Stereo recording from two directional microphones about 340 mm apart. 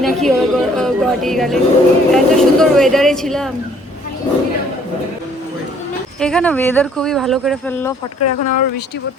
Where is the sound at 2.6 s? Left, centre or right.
Centre.